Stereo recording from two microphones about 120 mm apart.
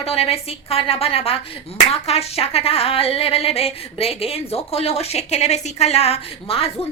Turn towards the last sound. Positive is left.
turn(degrees=55)  # may be behind; listen again after turning